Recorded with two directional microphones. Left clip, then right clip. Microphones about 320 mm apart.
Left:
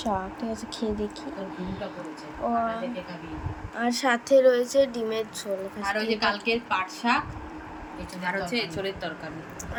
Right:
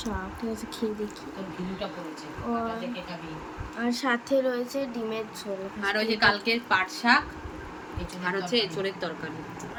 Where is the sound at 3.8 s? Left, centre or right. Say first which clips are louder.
Left 3 dB; centre.